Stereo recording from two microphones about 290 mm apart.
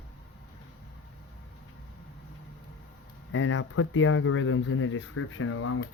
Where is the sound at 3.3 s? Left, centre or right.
Left.